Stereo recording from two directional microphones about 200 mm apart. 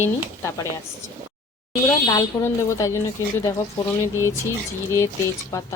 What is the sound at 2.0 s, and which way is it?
Speech, 15° left (ahead or behind).